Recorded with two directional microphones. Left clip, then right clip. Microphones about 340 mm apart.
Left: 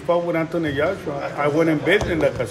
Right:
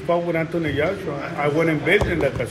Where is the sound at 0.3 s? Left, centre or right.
Centre.